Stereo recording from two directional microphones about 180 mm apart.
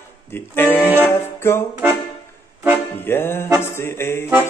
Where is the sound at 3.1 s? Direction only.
10° left (ahead or behind).